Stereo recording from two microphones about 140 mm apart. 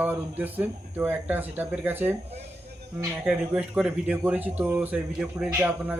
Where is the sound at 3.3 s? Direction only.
5° right (ahead or behind).